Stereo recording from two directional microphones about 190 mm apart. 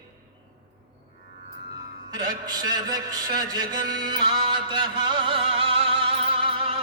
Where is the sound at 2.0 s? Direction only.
20° right (ahead or behind).